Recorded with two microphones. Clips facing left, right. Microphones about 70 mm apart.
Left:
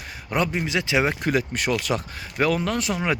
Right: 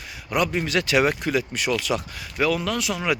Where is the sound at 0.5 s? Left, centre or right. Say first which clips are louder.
Right 2 dB; centre.